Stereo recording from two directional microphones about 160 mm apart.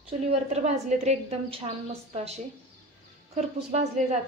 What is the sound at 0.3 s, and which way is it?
A woman's voice, 45° right (ahead or behind).